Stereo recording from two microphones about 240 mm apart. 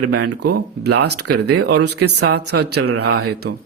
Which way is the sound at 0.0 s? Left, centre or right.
Right.